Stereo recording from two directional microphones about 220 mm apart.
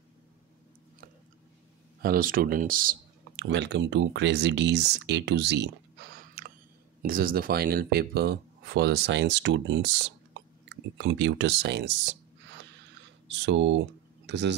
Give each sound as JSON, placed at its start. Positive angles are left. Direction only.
{"t": 2.0, "sound": "speech", "side_deg": -40}
{"t": 3.4, "sound": "speech", "side_deg": -55}